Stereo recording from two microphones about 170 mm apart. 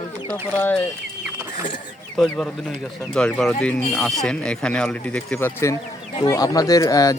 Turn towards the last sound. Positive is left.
turn(degrees=20)  # may be behind; listen again after turning